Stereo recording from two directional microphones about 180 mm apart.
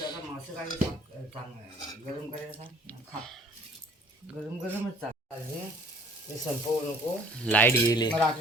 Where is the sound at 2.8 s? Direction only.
5° left (ahead or behind).